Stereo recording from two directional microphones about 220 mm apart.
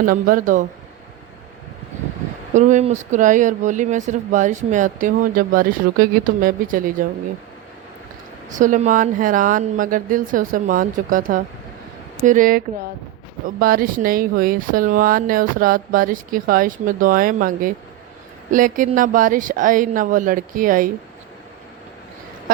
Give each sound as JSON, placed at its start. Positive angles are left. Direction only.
{"t": 0.1, "sound": "speech", "side_deg": -40}
{"t": 2.5, "sound": "speech", "side_deg": -35}
{"t": 8.4, "sound": "speech", "side_deg": -35}